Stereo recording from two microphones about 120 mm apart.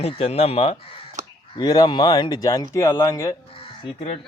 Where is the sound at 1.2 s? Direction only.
85° right.